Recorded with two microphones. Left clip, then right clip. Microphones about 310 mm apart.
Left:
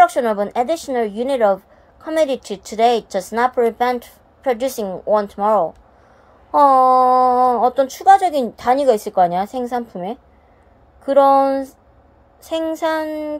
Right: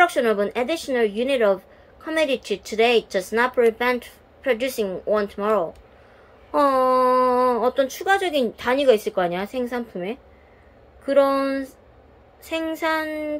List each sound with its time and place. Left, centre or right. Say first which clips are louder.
0.1 s a woman's voice: left 2 dB; centre